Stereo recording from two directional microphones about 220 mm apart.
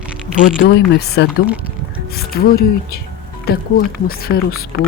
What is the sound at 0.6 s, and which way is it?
Speech, 50° left (ahead or behind).